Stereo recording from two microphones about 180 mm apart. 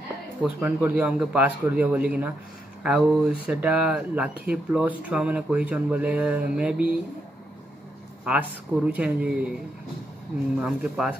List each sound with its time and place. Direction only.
0.4 s speech: 10° right (ahead or behind)
8.3 s speech: 5° right (ahead or behind)
10.6 s speech: 5° right (ahead or behind)